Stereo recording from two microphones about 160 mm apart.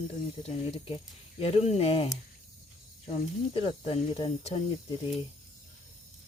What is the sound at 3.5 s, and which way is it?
Speech, 40° left (ahead or behind).